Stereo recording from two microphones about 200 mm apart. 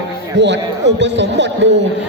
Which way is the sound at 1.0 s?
60° right (ahead or behind).